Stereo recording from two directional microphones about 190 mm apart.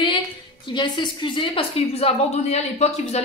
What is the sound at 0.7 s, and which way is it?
A woman's voice, 25° left (ahead or behind).